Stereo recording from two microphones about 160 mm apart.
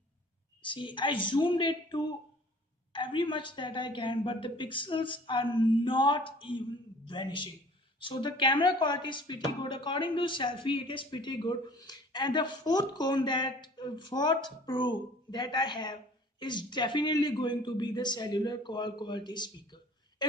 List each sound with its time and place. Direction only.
0.6 s a woman's voice: 30° left (ahead or behind)